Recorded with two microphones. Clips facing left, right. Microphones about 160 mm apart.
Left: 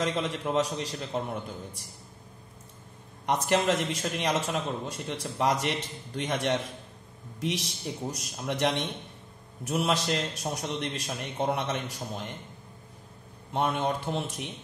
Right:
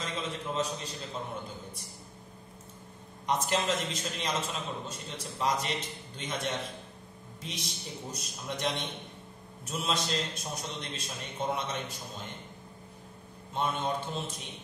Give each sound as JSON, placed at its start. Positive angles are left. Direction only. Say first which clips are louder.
{"t": 0.0, "sound": "a man's voice", "louder": "left 7 dB", "side_deg": 70}
{"t": 3.3, "sound": "a man's voice", "louder": "left 4 dB", "side_deg": 65}
{"t": 13.5, "sound": "a man's voice", "louder": "left 4 dB", "side_deg": 70}